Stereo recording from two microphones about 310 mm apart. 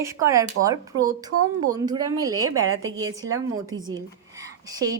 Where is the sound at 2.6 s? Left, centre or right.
Right.